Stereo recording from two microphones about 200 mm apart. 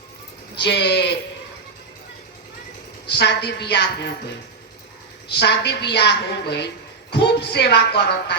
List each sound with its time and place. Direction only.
0.6 s sheep: 55° left (ahead or behind)
3.1 s a woman's voice: 55° left (ahead or behind)
5.3 s a woman's voice: 60° left (ahead or behind)